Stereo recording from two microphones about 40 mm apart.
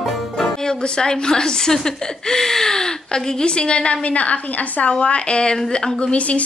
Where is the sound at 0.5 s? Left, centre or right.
Centre.